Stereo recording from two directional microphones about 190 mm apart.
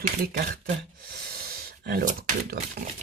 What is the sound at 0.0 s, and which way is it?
Speech, 50° right (ahead or behind).